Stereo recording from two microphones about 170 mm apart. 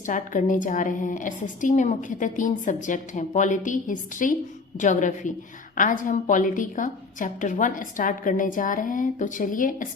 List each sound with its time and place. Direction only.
0.0 s a woman's voice: 50° left (ahead or behind)